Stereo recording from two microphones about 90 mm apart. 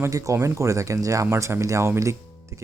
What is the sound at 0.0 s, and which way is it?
Speech, 35° right (ahead or behind).